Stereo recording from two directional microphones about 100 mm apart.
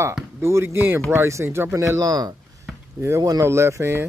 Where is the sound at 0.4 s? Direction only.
25° right (ahead or behind).